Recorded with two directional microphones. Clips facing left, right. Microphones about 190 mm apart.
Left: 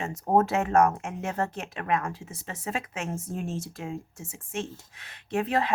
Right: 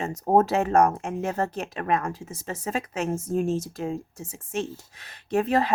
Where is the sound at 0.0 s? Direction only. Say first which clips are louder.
Right 3 dB; 35° right (ahead or behind).